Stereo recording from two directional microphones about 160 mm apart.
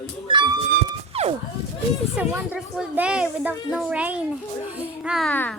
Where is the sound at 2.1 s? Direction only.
10° right (ahead or behind).